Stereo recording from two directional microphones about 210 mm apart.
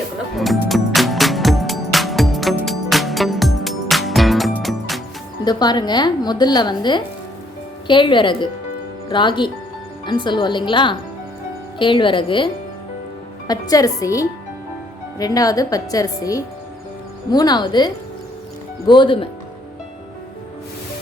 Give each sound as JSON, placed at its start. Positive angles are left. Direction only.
{"t": 0.3, "sound": "music", "side_deg": 0}
{"t": 5.5, "sound": "speech", "side_deg": 20}
{"t": 13.5, "sound": "a woman's voice", "side_deg": 15}